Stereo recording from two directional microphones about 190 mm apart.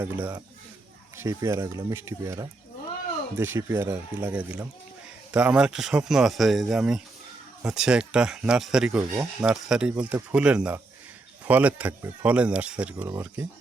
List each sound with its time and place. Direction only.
0.0 s speech: 10° right (ahead or behind)